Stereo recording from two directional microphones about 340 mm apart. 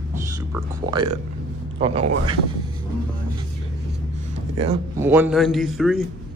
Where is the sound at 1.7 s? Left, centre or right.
Centre.